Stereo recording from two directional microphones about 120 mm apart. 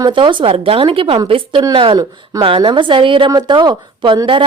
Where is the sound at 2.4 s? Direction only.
45° right (ahead or behind).